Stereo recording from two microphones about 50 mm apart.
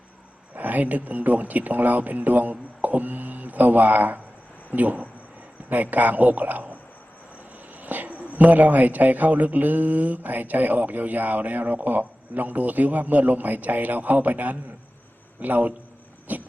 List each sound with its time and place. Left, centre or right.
0.5 s speech: right
7.8 s speech: right